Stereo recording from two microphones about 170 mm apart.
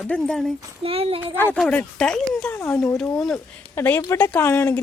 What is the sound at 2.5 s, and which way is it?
Speech, 15° left (ahead or behind).